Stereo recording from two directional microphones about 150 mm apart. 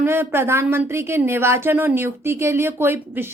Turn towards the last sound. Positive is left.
turn(degrees=-15)  # may be behind; listen again after turning